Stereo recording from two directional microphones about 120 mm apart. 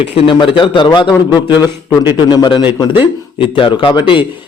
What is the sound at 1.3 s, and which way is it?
Speech, 15° right (ahead or behind).